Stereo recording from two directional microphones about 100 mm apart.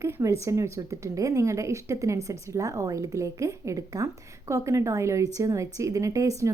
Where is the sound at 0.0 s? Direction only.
30° right (ahead or behind).